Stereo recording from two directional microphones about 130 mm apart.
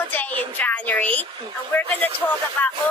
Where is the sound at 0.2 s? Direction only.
15° left (ahead or behind).